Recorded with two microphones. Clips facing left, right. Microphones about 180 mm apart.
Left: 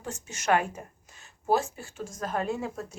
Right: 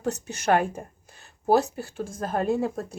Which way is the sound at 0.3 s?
35° right (ahead or behind).